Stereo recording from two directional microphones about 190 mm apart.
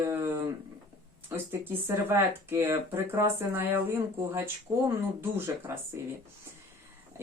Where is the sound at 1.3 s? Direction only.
15° right (ahead or behind).